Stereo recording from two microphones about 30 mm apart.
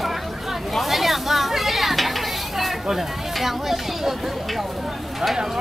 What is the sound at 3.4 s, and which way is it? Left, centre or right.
Speech, centre.